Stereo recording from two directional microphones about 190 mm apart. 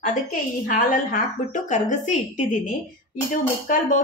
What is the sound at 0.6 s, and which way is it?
A woman's voice, 45° left (ahead or behind).